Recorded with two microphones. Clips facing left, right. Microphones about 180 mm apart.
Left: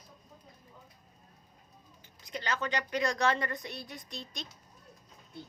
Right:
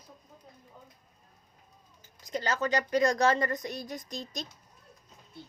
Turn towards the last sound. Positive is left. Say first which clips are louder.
# right 5 dB
turn(degrees=-40)  # may be behind; listen again after turning